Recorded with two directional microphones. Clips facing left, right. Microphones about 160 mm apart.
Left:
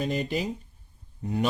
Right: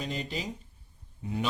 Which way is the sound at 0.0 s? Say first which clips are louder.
Left 7 dB; 55° left (ahead or behind).